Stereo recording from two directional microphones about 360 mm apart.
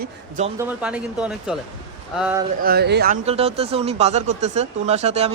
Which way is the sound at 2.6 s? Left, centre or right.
Right.